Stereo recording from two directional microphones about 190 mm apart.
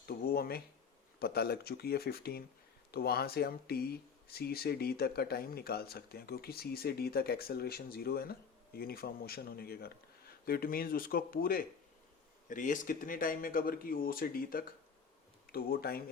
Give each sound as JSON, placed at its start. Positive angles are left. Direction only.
{"t": 0.0, "sound": "speech", "side_deg": 50}